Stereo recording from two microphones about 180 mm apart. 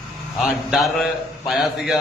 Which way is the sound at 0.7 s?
Centre (ahead or behind).